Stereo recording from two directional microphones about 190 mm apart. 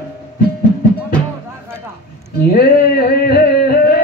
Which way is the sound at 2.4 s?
55° left (ahead or behind).